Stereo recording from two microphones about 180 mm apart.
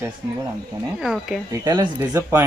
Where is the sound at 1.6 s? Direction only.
20° right (ahead or behind).